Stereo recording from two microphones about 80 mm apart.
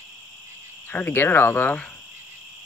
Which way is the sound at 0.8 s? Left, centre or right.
Left.